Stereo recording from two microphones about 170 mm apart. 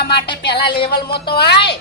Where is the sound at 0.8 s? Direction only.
30° left (ahead or behind).